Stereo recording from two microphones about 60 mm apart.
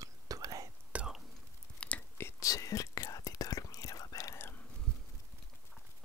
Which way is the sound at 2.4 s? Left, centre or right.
Left.